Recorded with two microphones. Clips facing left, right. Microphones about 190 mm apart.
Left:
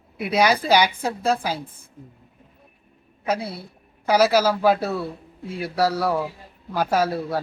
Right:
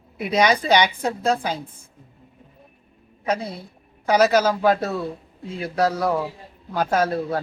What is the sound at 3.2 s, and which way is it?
A man's voice, 10° left (ahead or behind).